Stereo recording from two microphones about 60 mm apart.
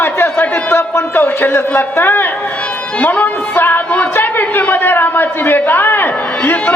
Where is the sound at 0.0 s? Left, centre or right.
Left.